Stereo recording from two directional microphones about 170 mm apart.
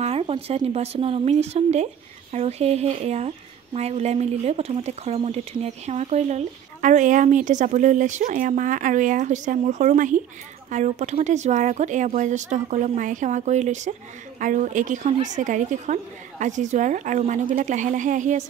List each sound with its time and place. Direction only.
0.0 s speech: 35° right (ahead or behind)